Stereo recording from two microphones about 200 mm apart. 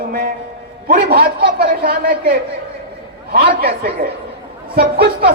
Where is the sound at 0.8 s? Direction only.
45° right (ahead or behind).